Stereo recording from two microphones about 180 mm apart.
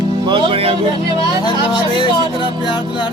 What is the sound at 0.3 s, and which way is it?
Speech, 30° right (ahead or behind).